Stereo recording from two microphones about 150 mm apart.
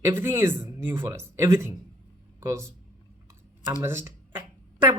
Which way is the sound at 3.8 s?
15° right (ahead or behind).